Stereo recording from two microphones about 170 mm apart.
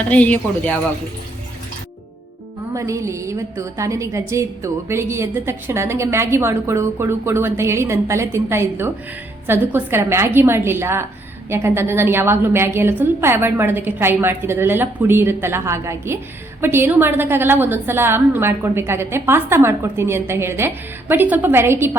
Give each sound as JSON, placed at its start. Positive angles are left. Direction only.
{"t": 0.1, "sound": "speech", "side_deg": 10}
{"t": 2.7, "sound": "a woman's voice", "side_deg": -15}